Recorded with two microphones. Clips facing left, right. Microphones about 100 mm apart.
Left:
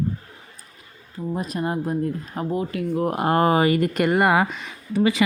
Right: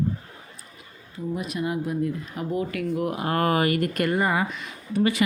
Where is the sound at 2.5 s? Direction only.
25° left (ahead or behind).